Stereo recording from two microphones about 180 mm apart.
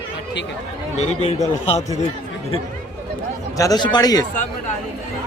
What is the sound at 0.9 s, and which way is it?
Speech, 35° left (ahead or behind).